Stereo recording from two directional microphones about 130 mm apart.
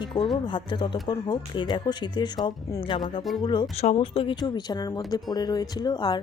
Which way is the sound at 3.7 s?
50° left (ahead or behind).